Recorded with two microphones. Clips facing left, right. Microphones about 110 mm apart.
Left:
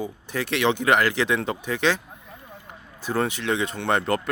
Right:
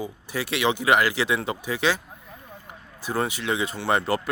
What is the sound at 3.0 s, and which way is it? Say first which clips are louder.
Speech: left 2 dB; 10° right (ahead or behind).